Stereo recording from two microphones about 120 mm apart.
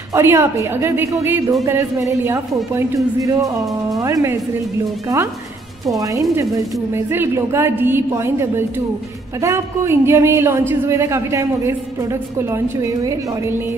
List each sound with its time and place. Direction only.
0.1 s speech: 20° right (ahead or behind)